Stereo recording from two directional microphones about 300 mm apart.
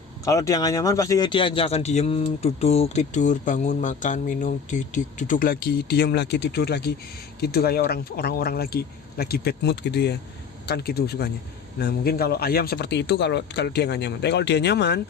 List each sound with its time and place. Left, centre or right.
0.3 s speech: centre; by 15.0 s left